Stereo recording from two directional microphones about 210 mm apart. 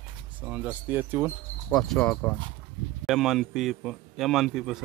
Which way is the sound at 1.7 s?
5° left (ahead or behind).